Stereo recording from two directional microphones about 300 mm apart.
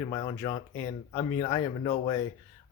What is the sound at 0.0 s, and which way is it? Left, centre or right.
Speech, centre.